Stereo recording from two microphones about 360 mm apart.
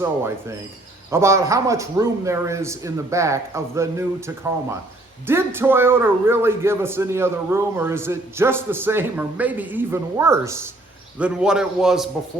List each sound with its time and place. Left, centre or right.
0.0 s a man's voice: centre